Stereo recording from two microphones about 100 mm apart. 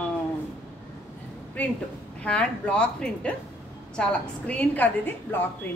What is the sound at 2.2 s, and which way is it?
A woman's voice, 10° left (ahead or behind).